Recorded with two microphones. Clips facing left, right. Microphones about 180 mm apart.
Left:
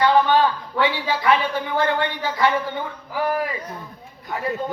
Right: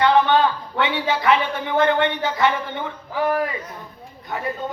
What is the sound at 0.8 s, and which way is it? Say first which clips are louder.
Speech: even; 25° right (ahead or behind).